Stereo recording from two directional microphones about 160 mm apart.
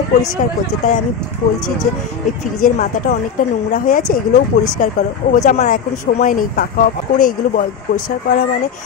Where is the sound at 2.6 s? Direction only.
55° left (ahead or behind).